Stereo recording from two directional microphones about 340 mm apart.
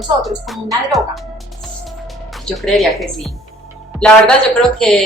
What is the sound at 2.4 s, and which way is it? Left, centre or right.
Speech, centre.